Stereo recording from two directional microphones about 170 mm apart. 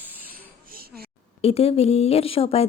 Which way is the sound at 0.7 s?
60° right (ahead or behind).